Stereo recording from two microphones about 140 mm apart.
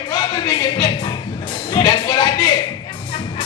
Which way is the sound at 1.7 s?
35° left (ahead or behind).